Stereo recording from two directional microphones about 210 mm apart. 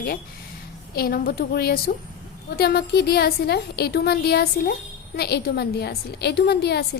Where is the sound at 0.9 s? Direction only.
45° left (ahead or behind).